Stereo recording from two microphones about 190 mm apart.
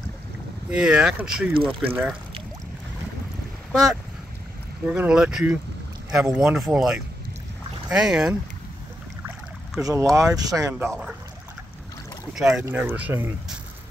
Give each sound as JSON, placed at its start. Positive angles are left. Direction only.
{"t": 0.7, "sound": "speech", "side_deg": -5}
{"t": 4.8, "sound": "speech", "side_deg": -5}
{"t": 6.4, "sound": "speech", "side_deg": -5}
{"t": 9.8, "sound": "speech", "side_deg": -20}
{"t": 10.9, "sound": "speech", "side_deg": -5}
{"t": 12.4, "sound": "speech", "side_deg": -5}